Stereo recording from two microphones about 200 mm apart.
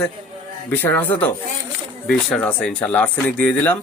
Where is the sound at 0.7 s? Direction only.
10° left (ahead or behind).